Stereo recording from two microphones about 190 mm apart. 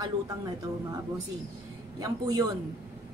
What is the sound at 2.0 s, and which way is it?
Speech, 20° right (ahead or behind).